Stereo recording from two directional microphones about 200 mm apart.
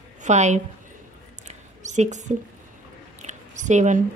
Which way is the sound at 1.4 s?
35° right (ahead or behind).